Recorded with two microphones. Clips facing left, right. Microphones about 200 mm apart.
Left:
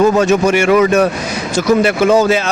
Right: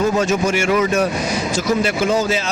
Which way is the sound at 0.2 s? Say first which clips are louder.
Left 6 dB; 65° left (ahead or behind).